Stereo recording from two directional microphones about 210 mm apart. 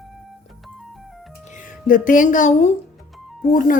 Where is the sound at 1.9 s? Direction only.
40° left (ahead or behind).